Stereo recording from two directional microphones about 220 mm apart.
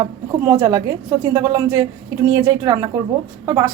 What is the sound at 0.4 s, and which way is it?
A woman's voice, 15° right (ahead or behind).